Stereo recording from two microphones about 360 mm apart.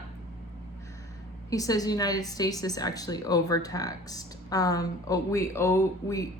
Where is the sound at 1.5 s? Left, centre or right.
Centre.